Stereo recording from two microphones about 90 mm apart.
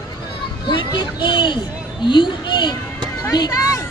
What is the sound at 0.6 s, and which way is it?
Speech, 60° left (ahead or behind).